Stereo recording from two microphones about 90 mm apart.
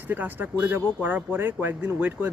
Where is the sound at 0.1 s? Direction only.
20° right (ahead or behind).